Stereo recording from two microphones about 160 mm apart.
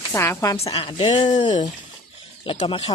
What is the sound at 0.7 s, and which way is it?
Speech, 30° left (ahead or behind).